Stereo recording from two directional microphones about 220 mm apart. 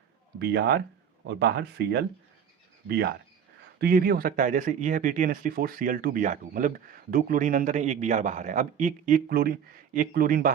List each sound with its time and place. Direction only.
0.3 s speech: 50° right (ahead or behind)
3.8 s speech: 40° right (ahead or behind)